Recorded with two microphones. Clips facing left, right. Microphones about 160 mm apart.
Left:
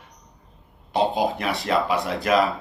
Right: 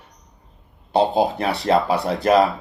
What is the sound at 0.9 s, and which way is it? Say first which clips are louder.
Speech: right 4 dB; 30° right (ahead or behind).